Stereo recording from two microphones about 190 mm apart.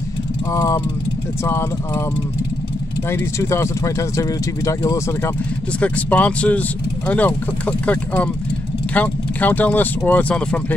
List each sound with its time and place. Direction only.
0.5 s speech: 15° left (ahead or behind)
3.1 s speech: 15° left (ahead or behind)